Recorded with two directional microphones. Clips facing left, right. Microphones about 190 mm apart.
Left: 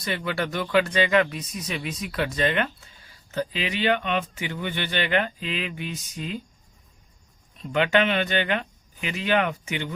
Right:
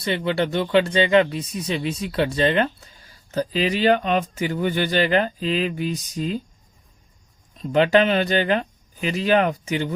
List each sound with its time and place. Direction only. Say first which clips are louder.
0.0 s speech: right 6 dB; 25° right (ahead or behind)
7.6 s speech: right 5 dB; 35° right (ahead or behind)